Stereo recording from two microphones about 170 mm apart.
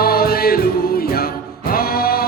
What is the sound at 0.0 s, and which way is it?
Music, 60° left (ahead or behind).